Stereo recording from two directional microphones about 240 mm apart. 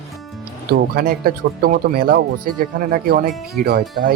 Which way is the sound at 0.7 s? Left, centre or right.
Right.